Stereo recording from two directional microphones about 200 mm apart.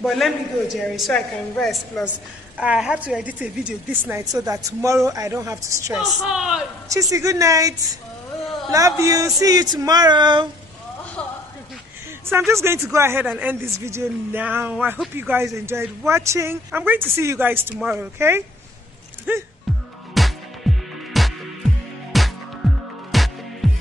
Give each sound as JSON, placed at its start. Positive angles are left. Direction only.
{"t": 0.0, "sound": "a woman's voice", "side_deg": 0}
{"t": 5.9, "sound": "a woman's voice", "side_deg": 0}
{"t": 6.9, "sound": "a woman's voice", "side_deg": -15}
{"t": 8.7, "sound": "a woman's voice", "side_deg": -15}
{"t": 12.3, "sound": "a woman's voice", "side_deg": -10}
{"t": 19.3, "sound": "music", "side_deg": -10}